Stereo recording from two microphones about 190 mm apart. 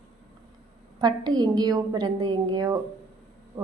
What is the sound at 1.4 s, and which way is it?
A woman's voice, 20° right (ahead or behind).